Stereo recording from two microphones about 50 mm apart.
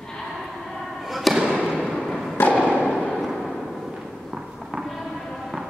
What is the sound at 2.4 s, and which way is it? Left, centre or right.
Thump, left.